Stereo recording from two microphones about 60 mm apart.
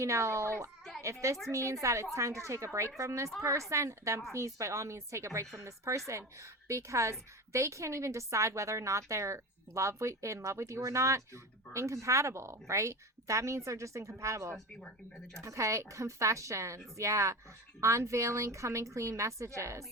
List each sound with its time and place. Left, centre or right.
0.0 s a woman's voice: right
14.8 s speech: centre
15.4 s a woman's voice: right